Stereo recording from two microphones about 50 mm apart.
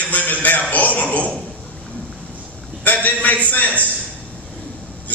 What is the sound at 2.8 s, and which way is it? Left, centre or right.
A man's voice, left.